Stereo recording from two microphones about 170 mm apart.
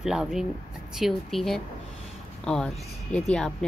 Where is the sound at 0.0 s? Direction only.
Centre (ahead or behind).